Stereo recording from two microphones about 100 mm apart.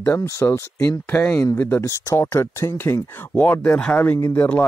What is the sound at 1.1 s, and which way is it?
Speech, 15° left (ahead or behind).